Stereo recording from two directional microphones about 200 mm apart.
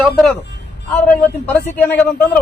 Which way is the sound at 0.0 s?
5° left (ahead or behind).